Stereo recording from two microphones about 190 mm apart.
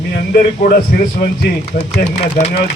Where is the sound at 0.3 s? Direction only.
50° left (ahead or behind).